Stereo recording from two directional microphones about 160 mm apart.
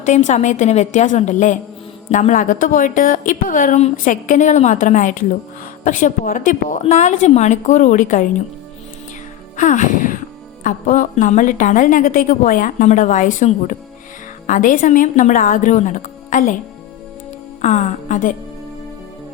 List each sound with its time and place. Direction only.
0.0 s a woman's voice: 50° left (ahead or behind)
9.6 s a woman's voice: 50° left (ahead or behind)
17.6 s a woman's voice: 45° left (ahead or behind)